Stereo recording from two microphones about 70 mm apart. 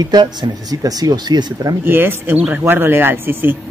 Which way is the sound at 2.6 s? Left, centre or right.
Right.